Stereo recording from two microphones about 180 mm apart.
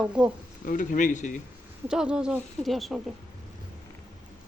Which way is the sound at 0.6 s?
45° left (ahead or behind).